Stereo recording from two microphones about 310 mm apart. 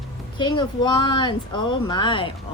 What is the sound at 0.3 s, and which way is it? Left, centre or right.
Speech, centre.